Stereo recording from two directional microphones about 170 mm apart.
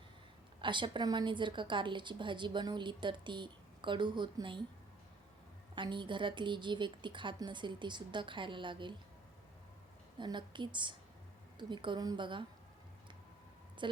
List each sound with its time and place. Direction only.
0.6 s a woman's voice: 30° right (ahead or behind)
5.7 s a woman's voice: 30° right (ahead or behind)
10.2 s a woman's voice: 25° right (ahead or behind)
13.8 s a sound: 30° right (ahead or behind)